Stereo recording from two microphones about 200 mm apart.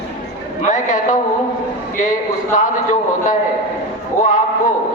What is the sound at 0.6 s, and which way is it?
A man's voice, 40° left (ahead or behind).